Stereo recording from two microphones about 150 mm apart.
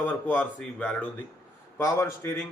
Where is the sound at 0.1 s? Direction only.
10° left (ahead or behind).